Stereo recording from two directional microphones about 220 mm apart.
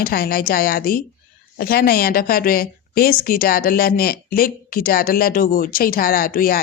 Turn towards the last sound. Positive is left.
turn(degrees=40)  # may be behind; listen again after turning